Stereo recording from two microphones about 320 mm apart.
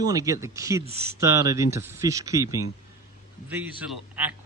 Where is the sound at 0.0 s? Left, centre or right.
Centre.